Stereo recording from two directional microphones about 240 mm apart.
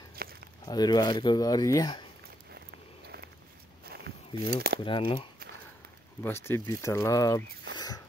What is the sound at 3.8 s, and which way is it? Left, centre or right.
Walk, right.